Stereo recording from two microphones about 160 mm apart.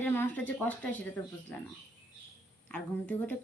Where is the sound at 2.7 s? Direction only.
10° left (ahead or behind).